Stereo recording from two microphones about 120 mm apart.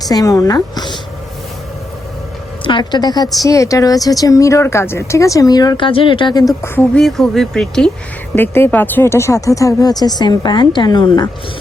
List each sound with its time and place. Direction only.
0.0 s a woman's voice: 30° left (ahead or behind)
2.6 s a woman's voice: 40° left (ahead or behind)
6.5 s a woman's voice: 20° left (ahead or behind)
6.9 s speech: 5° left (ahead or behind)
8.4 s a woman's voice: 20° left (ahead or behind)
10.2 s a woman's voice: 40° left (ahead or behind)